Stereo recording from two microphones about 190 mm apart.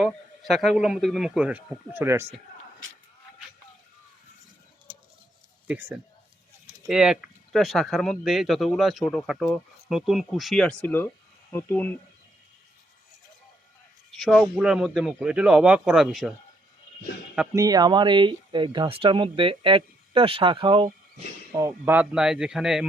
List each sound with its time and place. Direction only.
0.0 s speech: centre (ahead or behind)
5.6 s speech: 10° right (ahead or behind); by 11.9 s 10° left (ahead or behind)
14.1 s speech: centre (ahead or behind)
17.5 s speech: 20° right (ahead or behind)
21.5 s speech: 15° right (ahead or behind)